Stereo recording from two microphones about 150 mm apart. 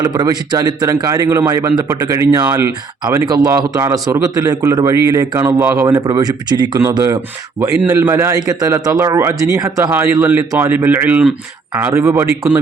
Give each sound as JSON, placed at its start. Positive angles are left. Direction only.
{"t": 0.0, "sound": "a man's voice", "side_deg": -25}